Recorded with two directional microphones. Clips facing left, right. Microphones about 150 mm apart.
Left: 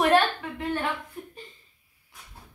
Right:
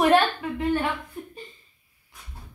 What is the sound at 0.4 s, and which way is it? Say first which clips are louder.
Speech: right 6 dB; 5° right (ahead or behind).